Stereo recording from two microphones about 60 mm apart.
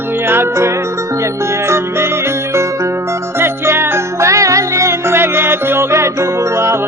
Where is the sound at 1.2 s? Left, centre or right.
Right.